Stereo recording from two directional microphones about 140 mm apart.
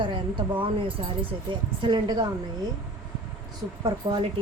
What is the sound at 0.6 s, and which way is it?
Speech, 40° right (ahead or behind).